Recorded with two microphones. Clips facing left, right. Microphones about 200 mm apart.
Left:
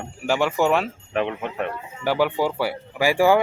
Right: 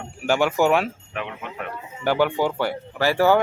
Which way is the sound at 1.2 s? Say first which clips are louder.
Left 9 dB; 35° left (ahead or behind).